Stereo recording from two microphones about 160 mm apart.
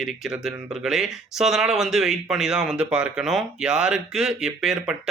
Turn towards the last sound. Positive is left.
turn(degrees=-5)  # may be behind; listen again after turning